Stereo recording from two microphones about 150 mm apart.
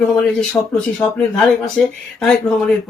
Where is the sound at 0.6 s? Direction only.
20° left (ahead or behind).